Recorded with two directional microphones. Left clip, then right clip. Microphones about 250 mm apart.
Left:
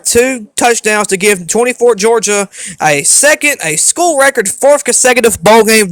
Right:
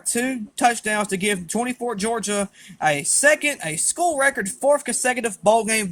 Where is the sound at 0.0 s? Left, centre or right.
Left.